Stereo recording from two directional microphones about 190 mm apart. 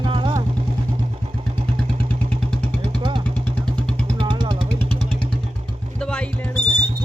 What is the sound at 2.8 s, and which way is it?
Vehicle, 25° right (ahead or behind).